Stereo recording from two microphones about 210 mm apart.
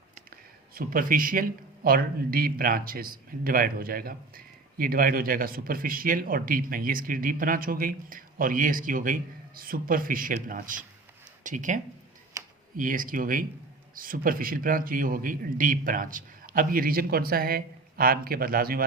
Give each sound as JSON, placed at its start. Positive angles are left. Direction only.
{"t": 0.7, "sound": "speech", "side_deg": -45}